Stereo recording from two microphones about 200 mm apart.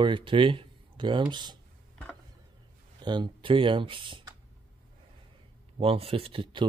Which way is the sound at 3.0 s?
25° right (ahead or behind).